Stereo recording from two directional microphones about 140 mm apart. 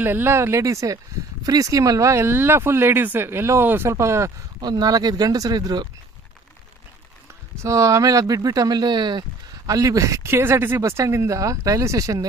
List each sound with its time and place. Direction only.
0.0 s speech: 15° right (ahead or behind)
4.6 s speech: 30° right (ahead or behind)
7.5 s speech: 20° right (ahead or behind)